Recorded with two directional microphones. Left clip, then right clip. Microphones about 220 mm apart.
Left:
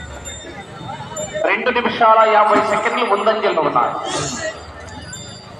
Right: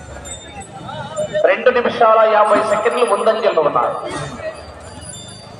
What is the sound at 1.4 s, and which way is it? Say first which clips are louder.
A man's voice: right 3 dB; 30° right (ahead or behind).